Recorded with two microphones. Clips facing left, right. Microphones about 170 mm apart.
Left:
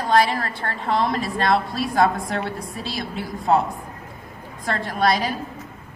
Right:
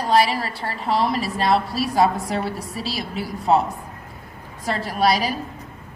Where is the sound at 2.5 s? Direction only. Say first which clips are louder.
Right 1 dB; 85° right.